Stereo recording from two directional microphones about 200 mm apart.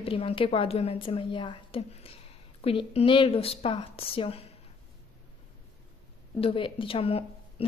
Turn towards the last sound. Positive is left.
turn(degrees=30)  # may be behind; listen again after turning